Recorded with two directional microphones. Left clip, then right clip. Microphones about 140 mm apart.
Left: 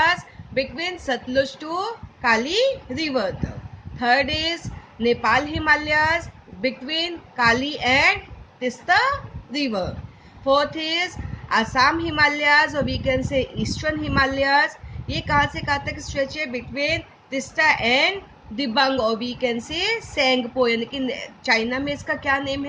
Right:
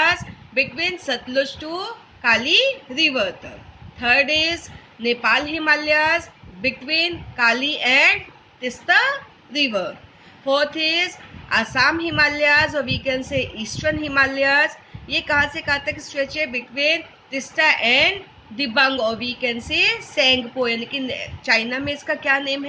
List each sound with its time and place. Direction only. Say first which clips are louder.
0.0 s a woman's voice: right 1 dB; 60° left (ahead or behind)